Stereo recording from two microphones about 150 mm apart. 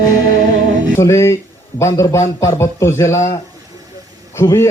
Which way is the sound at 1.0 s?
20° left (ahead or behind).